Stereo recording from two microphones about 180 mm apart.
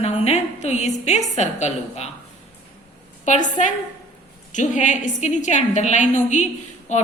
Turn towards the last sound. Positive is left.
turn(degrees=40)  # may be behind; listen again after turning